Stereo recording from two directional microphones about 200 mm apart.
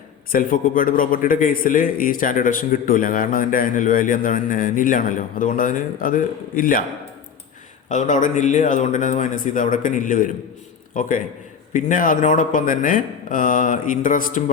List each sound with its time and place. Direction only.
0.3 s a man's voice: 45° left (ahead or behind)
7.9 s speech: 40° left (ahead or behind)